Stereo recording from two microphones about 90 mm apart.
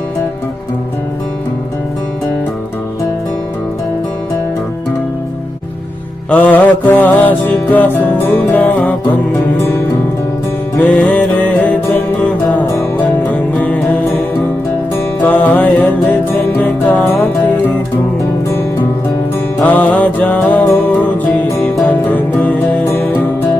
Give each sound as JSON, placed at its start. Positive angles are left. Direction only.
{"t": 6.3, "sound": "music", "side_deg": 15}
{"t": 10.8, "sound": "music", "side_deg": 15}
{"t": 12.7, "sound": "music", "side_deg": 20}
{"t": 15.2, "sound": "music", "side_deg": 15}
{"t": 19.6, "sound": "music", "side_deg": 15}
{"t": 21.8, "sound": "music", "side_deg": 15}